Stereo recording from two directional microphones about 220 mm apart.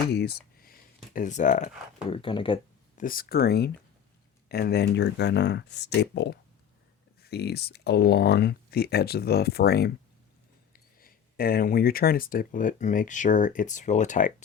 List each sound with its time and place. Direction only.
0.1 s a sound: 45° left (ahead or behind)
1.1 s speech: 35° left (ahead or behind)
3.0 s speech: 40° left (ahead or behind)